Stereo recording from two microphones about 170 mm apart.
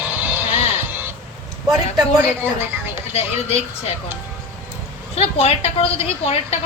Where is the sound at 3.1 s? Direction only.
40° left (ahead or behind).